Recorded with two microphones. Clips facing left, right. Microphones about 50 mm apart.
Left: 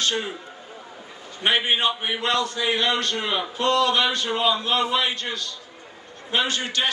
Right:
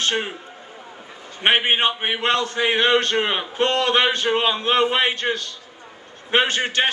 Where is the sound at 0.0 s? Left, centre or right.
Right.